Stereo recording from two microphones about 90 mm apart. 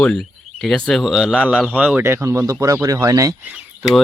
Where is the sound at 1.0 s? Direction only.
5° right (ahead or behind).